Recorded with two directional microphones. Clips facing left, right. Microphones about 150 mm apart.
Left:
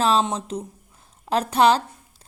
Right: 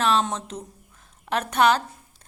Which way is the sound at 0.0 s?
35° left (ahead or behind).